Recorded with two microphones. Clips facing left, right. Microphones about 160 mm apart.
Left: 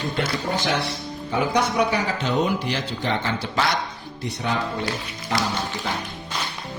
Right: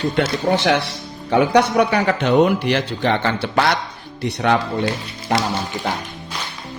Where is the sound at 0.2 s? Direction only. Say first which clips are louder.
Right 7 dB; 75° right (ahead or behind).